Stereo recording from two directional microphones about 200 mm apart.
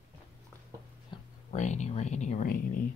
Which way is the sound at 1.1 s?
35° left (ahead or behind).